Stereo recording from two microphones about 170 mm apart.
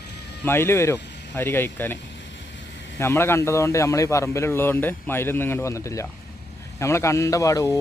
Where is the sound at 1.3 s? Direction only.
15° left (ahead or behind).